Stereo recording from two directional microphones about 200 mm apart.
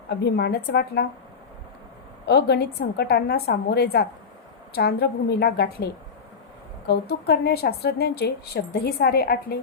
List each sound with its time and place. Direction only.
0.3 s a woman's voice: 55° left (ahead or behind)
2.2 s a woman's voice: 55° left (ahead or behind)